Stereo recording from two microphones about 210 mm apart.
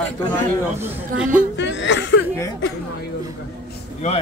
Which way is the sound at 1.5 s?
60° left (ahead or behind).